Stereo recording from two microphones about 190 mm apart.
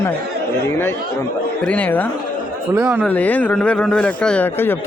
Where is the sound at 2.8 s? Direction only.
5° right (ahead or behind).